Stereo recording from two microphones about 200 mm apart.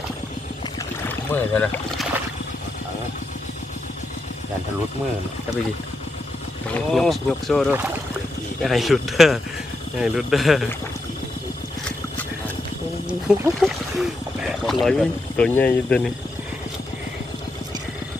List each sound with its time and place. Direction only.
1.0 s speech: 10° left (ahead or behind)
6.7 s speech: centre (ahead or behind)
13.1 s speech: 5° right (ahead or behind)